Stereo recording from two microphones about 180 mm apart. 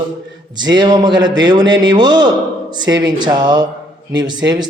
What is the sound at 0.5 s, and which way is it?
A man's voice, 25° right (ahead or behind).